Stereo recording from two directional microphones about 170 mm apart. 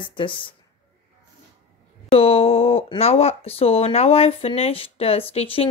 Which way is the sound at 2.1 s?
35° left (ahead or behind).